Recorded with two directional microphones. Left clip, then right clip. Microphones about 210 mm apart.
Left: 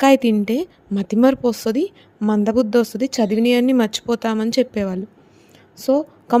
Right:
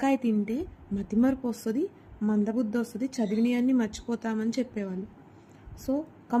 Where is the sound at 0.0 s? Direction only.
50° left (ahead or behind).